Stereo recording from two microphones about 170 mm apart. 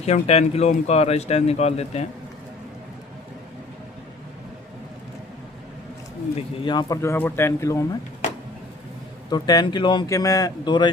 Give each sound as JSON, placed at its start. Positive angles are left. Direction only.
{"t": 0.0, "sound": "speech", "side_deg": 40}
{"t": 6.7, "sound": "speech", "side_deg": 25}
{"t": 9.3, "sound": "speech", "side_deg": 25}